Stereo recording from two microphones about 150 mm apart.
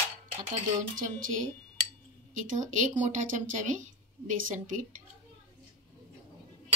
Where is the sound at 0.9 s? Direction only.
60° right (ahead or behind).